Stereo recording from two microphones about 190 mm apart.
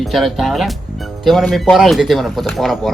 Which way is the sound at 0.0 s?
Centre (ahead or behind).